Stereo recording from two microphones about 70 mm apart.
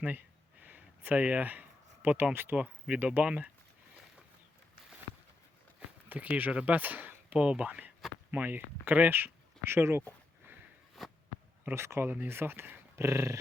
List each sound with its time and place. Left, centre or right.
0.0 s a sound: right
2.3 s speech: right
2.6 s speech: centre
6.1 s speech: right
11.0 s a sound: centre
11.6 s speech: right
13.0 s dog: right